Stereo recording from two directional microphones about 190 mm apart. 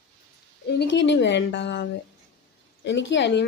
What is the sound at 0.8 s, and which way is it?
Speech, 70° left (ahead or behind).